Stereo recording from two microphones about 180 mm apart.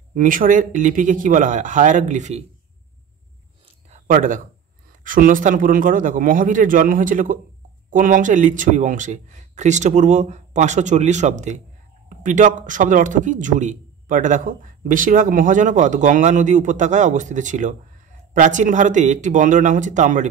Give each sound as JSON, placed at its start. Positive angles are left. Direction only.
{"t": 0.1, "sound": "a man's voice", "side_deg": -50}
{"t": 3.9, "sound": "a sound", "side_deg": -45}
{"t": 5.0, "sound": "a man's voice", "side_deg": -50}